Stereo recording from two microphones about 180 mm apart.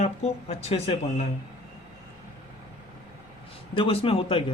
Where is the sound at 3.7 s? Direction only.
30° left (ahead or behind).